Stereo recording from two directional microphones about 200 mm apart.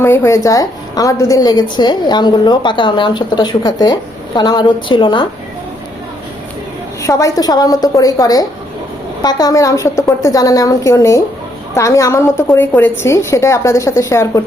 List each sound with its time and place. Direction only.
0.0 s a woman's voice: 10° left (ahead or behind)
7.0 s a woman's voice: 15° left (ahead or behind)